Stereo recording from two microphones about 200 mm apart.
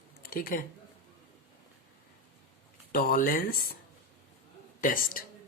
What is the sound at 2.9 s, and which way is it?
Speech, 45° left (ahead or behind).